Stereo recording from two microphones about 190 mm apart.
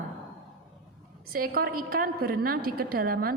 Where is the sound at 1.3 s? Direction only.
50° right (ahead or behind).